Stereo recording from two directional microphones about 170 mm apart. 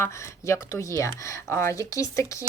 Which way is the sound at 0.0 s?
15° left (ahead or behind).